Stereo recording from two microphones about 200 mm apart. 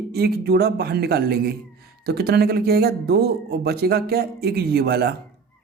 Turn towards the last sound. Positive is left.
turn(degrees=-50)  # may be behind; listen again after turning